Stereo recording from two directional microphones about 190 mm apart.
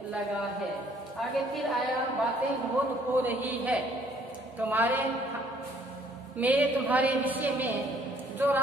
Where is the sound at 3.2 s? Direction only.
10° right (ahead or behind).